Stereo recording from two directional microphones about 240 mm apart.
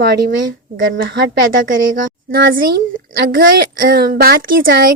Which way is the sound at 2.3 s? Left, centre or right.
Right.